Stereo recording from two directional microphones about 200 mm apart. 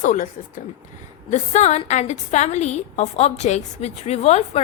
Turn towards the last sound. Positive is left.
turn(degrees=30)  # may be behind; listen again after turning